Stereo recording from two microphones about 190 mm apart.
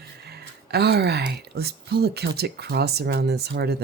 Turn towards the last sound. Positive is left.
turn(degrees=-60)  # may be behind; listen again after turning